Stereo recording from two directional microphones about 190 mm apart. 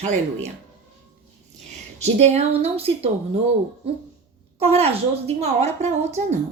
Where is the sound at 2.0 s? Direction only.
35° right (ahead or behind).